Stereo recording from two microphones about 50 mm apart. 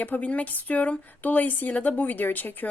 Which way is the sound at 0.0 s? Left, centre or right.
Left.